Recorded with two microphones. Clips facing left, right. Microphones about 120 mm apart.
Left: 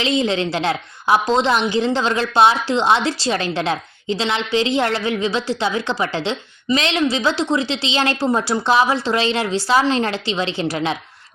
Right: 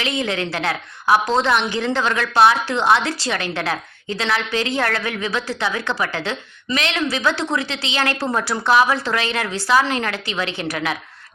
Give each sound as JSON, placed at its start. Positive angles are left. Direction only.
{"t": 0.0, "sound": "a woman's voice", "side_deg": 25}